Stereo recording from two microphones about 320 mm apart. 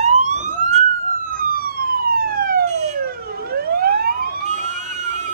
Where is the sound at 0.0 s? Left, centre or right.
Right.